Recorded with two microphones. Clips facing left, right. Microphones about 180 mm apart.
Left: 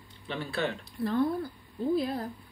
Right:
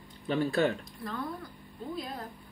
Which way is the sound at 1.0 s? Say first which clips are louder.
Left 14 dB; 35° left (ahead or behind).